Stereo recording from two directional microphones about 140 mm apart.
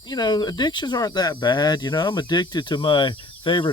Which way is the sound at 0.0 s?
30° left (ahead or behind).